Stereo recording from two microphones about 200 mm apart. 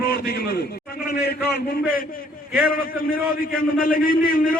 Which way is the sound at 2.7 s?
45° left (ahead or behind).